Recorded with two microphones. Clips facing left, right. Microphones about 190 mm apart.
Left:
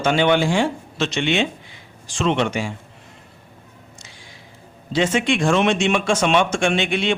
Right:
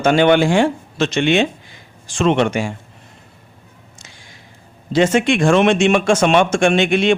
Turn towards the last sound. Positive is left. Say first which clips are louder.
# right 6 dB
turn(degrees=-50)  # may be behind; listen again after turning